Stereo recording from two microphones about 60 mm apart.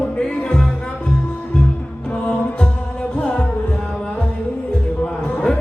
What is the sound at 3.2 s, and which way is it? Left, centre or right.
Music, centre.